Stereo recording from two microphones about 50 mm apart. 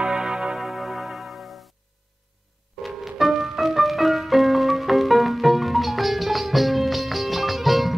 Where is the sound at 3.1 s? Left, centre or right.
Centre.